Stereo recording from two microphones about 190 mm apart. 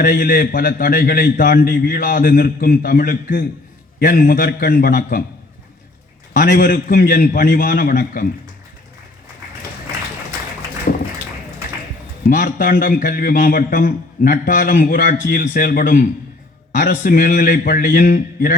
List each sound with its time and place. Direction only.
0.0 s a man's voice: 50° left (ahead or behind)
6.3 s a man's voice: 50° left (ahead or behind)
10.9 s a sound: 50° left (ahead or behind)
12.3 s a man's voice: 45° left (ahead or behind)